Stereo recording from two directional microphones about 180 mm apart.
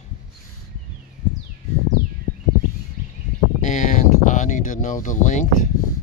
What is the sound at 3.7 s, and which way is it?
Speech, 45° left (ahead or behind).